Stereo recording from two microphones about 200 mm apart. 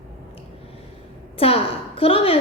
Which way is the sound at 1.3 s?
30° left (ahead or behind).